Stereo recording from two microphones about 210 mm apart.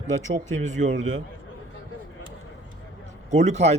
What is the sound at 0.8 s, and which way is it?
Speech, 40° right (ahead or behind).